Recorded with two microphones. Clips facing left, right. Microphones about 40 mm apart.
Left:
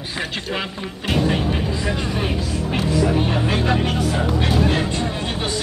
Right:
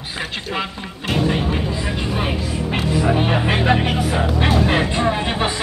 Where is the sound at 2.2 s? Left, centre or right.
Right.